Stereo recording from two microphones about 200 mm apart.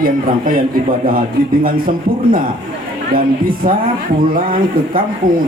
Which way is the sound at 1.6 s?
45° right (ahead or behind).